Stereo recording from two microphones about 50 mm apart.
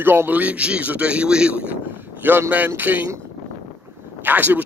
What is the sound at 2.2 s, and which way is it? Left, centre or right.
Speech, right.